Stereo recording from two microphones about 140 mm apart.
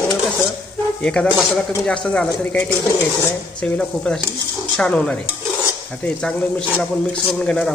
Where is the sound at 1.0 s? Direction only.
5° left (ahead or behind).